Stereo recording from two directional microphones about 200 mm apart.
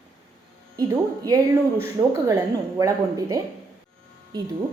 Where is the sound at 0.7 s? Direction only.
15° right (ahead or behind).